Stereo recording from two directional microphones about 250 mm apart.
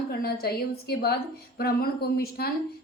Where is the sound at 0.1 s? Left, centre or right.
Left.